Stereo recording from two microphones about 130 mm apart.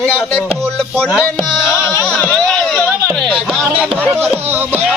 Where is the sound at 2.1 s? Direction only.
10° left (ahead or behind).